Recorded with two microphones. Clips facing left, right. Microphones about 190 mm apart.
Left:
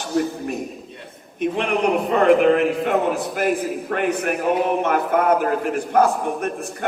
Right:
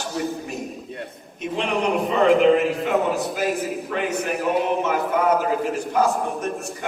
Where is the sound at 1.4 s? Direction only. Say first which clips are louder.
Left 3 dB; 55° left (ahead or behind).